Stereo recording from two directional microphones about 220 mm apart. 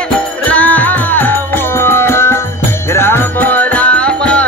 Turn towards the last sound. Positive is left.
turn(degrees=5)  # may be behind; listen again after turning